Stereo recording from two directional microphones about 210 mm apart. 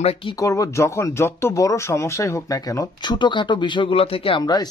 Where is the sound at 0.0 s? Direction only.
25° left (ahead or behind).